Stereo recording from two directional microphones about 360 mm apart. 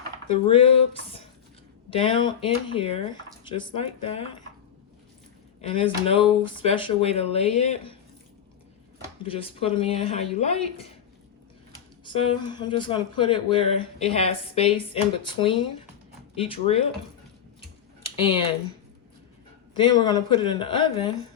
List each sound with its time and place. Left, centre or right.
0.4 s speech: centre
5.6 s speech: centre
9.2 s speech: centre
12.0 s speech: centre
18.2 s speech: centre
19.7 s speech: centre